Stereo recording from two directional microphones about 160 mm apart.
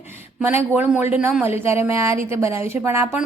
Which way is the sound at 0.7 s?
15° right (ahead or behind).